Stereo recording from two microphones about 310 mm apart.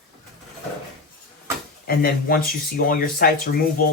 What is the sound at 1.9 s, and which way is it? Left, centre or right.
Speech, left.